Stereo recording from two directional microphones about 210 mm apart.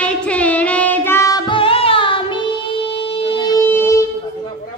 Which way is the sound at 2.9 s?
25° left (ahead or behind).